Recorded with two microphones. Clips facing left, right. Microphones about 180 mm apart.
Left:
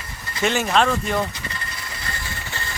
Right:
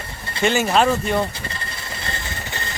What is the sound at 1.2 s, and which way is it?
Mechanisms, 30° right (ahead or behind).